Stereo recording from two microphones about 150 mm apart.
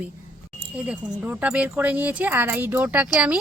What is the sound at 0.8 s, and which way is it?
Speech, 10° right (ahead or behind).